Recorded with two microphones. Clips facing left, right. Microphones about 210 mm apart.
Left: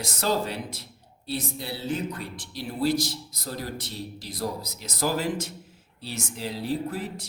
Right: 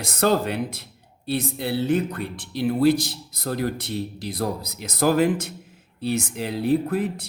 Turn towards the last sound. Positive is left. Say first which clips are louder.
# right 8 dB
turn(degrees=-55)  # may be behind; listen again after turning